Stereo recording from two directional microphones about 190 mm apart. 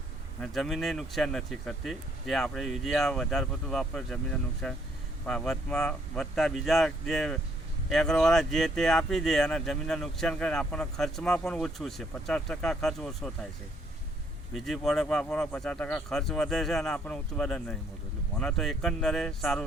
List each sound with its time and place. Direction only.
0.4 s speech: centre (ahead or behind)
14.5 s speech: centre (ahead or behind)